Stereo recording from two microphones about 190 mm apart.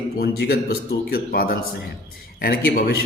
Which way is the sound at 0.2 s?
55° left (ahead or behind).